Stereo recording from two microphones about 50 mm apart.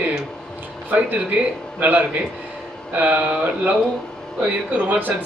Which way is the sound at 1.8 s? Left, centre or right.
Right.